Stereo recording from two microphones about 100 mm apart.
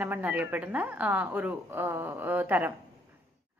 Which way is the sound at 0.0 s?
15° right (ahead or behind).